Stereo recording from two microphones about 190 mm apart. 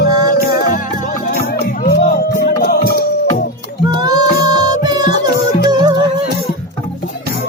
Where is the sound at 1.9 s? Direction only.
55° left (ahead or behind).